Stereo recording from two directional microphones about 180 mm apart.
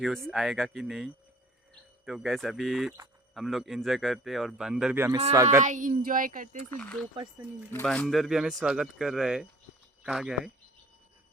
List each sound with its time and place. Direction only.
0.0 s a man's voice: centre (ahead or behind); by 5.6 s 15° right (ahead or behind)
5.6 s a child's voice: 45° right (ahead or behind)
6.7 s a man's voice: 5° left (ahead or behind)